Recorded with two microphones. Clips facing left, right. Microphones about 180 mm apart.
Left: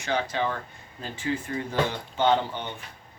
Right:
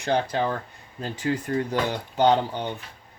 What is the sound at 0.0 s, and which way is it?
Speech, 55° right (ahead or behind).